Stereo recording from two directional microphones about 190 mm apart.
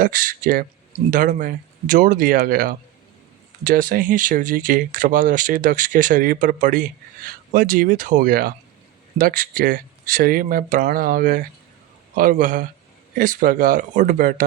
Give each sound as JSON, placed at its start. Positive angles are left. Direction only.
{"t": 0.0, "sound": "speech", "side_deg": -45}